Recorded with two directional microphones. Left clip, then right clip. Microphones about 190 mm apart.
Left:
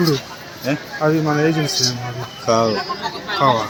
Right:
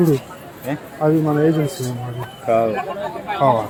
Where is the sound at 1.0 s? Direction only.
5° right (ahead or behind).